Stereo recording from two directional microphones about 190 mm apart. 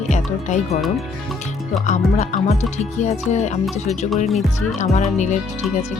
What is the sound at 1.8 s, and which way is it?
Speech, 40° left (ahead or behind).